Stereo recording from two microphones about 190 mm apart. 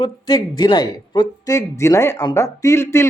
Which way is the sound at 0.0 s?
20° left (ahead or behind).